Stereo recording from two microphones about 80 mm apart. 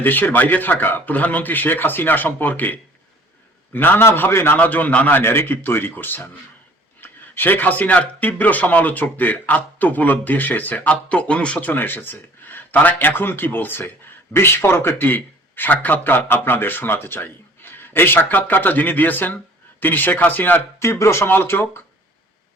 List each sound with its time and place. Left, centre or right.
0.0 s speech: left
20.8 s speech: left